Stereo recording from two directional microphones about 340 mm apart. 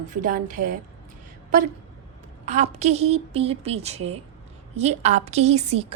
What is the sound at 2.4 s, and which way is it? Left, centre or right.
A woman's voice, centre.